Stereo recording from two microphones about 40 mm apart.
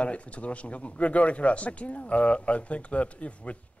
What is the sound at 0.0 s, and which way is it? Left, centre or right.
Speech, left.